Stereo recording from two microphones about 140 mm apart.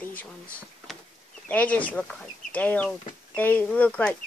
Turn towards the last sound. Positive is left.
turn(degrees=10)  # may be behind; listen again after turning